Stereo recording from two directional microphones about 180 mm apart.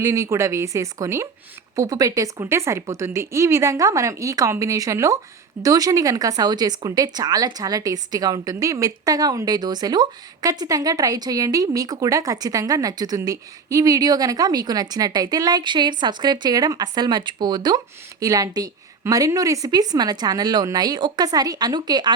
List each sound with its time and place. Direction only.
0.0 s a woman's voice: 15° right (ahead or behind)